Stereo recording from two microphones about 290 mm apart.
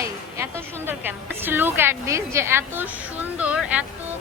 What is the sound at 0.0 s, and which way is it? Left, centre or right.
A woman's voice, centre.